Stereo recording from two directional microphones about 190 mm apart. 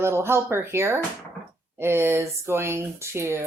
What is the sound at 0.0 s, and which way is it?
Speech, 15° right (ahead or behind).